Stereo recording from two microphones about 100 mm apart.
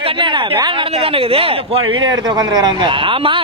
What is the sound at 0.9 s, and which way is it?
Speech, 70° right (ahead or behind).